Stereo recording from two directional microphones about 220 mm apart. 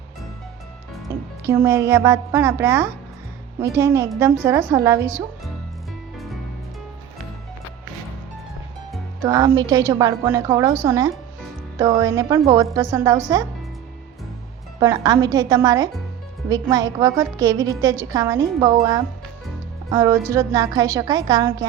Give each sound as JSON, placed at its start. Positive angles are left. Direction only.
{"t": 1.5, "sound": "a woman's voice", "side_deg": -10}
{"t": 9.2, "sound": "a woman's voice", "side_deg": -15}
{"t": 14.8, "sound": "a woman's voice", "side_deg": -15}
{"t": 19.9, "sound": "a woman's voice", "side_deg": -15}